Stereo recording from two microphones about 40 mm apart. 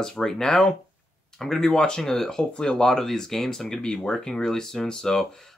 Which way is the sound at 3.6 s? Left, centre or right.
Left.